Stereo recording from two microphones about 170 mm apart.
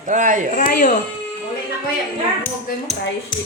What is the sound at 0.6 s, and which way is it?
Speech, 50° left (ahead or behind).